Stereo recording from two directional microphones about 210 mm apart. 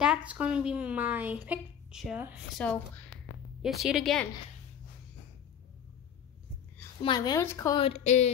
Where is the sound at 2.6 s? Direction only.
5° left (ahead or behind).